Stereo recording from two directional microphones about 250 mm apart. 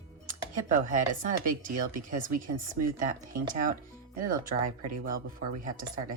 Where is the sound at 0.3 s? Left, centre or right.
Right.